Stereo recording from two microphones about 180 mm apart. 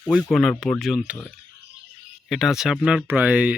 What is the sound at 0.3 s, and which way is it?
Speech, centre (ahead or behind).